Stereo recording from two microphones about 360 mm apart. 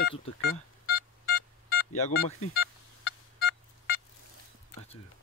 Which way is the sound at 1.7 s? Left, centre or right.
Left.